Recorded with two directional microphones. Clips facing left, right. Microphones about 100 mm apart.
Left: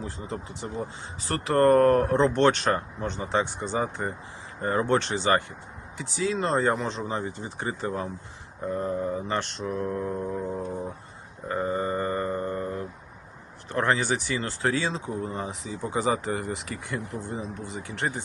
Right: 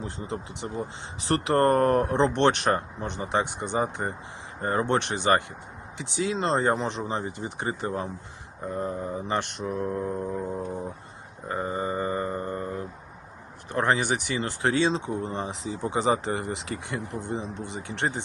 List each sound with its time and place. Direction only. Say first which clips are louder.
0.0 s speech: right 1 dB; 25° right (ahead or behind)
3.8 s speech: right 1 dB; 30° right (ahead or behind)
4.9 s speech: right 1 dB; 20° right (ahead or behind)
10.1 s a sound: even; centre (ahead or behind)
11.4 s a sound: left 2 dB; 20° right (ahead or behind)
13.7 s speech: even; 20° right (ahead or behind)